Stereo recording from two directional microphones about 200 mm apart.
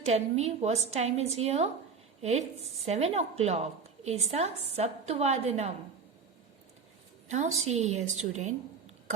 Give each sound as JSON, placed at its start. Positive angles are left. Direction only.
{"t": 0.0, "sound": "a woman's voice", "side_deg": -30}
{"t": 7.3, "sound": "a woman's voice", "side_deg": -35}